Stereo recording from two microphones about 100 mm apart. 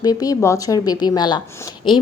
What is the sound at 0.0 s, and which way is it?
A woman's voice, 40° left (ahead or behind).